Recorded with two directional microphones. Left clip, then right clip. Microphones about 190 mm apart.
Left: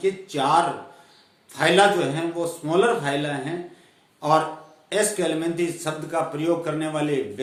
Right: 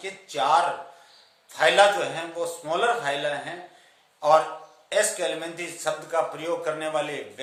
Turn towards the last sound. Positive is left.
turn(degrees=-15)  # may be behind; listen again after turning